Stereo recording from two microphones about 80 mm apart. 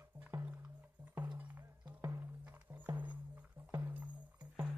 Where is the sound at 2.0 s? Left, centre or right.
Right.